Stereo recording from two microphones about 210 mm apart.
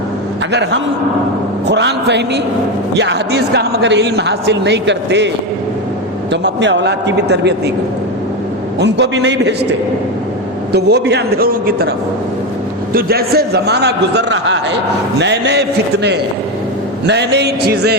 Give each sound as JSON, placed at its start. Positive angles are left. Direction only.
{"t": 0.5, "sound": "a man's voice", "side_deg": -55}
{"t": 6.3, "sound": "speech", "side_deg": -55}
{"t": 8.8, "sound": "speech", "side_deg": -55}
{"t": 10.7, "sound": "a man's voice", "side_deg": -50}
{"t": 12.9, "sound": "a man's voice", "side_deg": -45}
{"t": 17.1, "sound": "a man's voice", "side_deg": -55}